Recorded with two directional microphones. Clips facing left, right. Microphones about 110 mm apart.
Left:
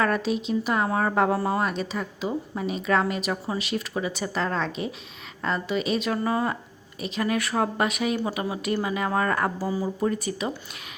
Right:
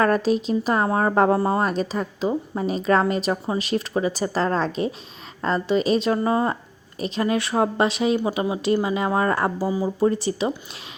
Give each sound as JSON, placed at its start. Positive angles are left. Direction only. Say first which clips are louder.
{"t": 0.0, "sound": "speech", "louder": "right 5 dB", "side_deg": -40}
{"t": 10.0, "sound": "speech", "louder": "right 5 dB", "side_deg": -30}